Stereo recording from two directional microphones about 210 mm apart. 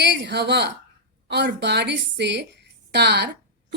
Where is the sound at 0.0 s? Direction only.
55° right (ahead or behind).